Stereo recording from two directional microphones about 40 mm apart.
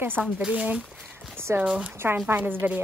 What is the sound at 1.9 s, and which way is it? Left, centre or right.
Speech, right.